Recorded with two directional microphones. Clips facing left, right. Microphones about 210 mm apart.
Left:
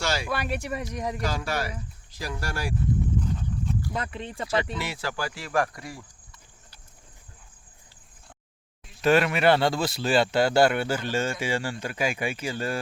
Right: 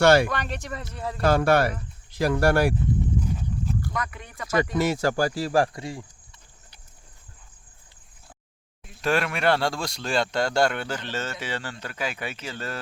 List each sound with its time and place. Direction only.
0.0 s speech: 60° right (ahead or behind)
0.3 s speech: 10° left (ahead or behind)
1.2 s speech: 60° right (ahead or behind)
3.2 s horse: 10° right (ahead or behind)
3.9 s speech: 25° left (ahead or behind)
4.4 s speech: 45° right (ahead or behind); by 6.1 s 25° right (ahead or behind)
9.0 s speech: centre (ahead or behind)